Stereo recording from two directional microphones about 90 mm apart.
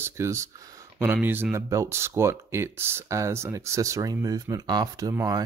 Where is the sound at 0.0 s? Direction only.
30° right (ahead or behind).